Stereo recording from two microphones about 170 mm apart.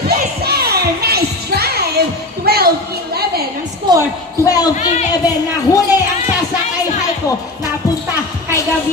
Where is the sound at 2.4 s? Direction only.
65° right (ahead or behind).